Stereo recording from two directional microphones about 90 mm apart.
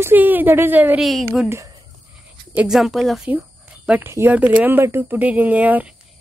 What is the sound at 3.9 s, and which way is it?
Speech, 25° right (ahead or behind).